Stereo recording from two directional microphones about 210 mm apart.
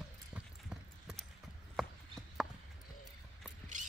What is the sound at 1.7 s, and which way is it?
Horse, centre (ahead or behind).